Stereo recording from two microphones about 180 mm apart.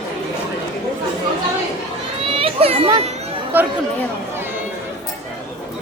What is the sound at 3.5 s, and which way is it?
Speech, 10° right (ahead or behind).